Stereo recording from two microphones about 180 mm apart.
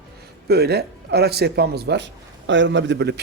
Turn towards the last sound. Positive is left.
turn(degrees=-70)  # may be behind; listen again after turning